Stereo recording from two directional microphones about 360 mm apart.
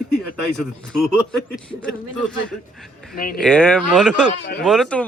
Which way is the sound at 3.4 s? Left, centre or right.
Centre.